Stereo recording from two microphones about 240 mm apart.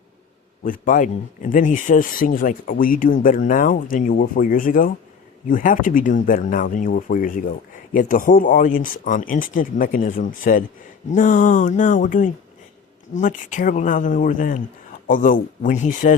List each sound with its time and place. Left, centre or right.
0.6 s speech: left